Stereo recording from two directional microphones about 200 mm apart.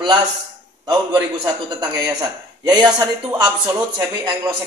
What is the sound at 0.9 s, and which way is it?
Speech, 20° right (ahead or behind).